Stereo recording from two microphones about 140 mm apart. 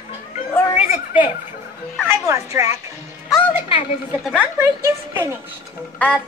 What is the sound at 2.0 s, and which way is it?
Speech, 20° right (ahead or behind).